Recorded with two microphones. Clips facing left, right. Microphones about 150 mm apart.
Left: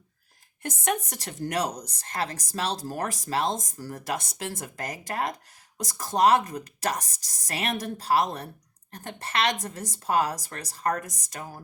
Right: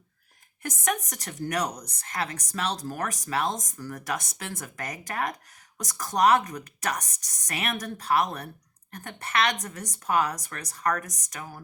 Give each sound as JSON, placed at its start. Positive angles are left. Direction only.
{"t": 0.6, "sound": "speech", "side_deg": 30}